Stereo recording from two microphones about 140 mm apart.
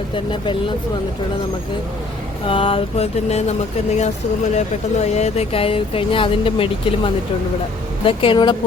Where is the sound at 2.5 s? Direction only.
40° left (ahead or behind).